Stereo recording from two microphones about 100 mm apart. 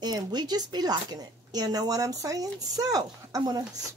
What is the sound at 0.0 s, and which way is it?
A woman's voice, 45° right (ahead or behind).